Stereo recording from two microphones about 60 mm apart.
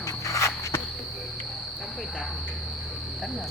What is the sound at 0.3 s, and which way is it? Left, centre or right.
Walk, left.